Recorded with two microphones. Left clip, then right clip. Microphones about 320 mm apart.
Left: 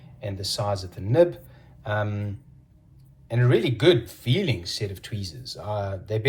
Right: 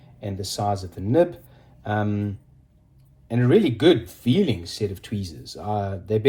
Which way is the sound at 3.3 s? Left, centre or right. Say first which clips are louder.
Right 4 dB; centre.